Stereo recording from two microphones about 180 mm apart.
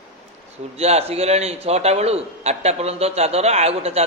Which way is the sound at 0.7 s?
35° right (ahead or behind).